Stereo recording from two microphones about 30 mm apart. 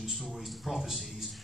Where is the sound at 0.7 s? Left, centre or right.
Centre.